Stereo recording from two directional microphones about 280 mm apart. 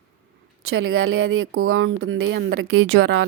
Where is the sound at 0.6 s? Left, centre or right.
Right.